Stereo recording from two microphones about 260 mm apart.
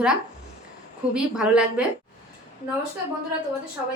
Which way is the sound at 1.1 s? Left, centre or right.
Centre.